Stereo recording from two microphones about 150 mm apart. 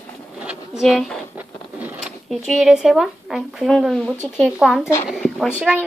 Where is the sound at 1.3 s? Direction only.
10° right (ahead or behind).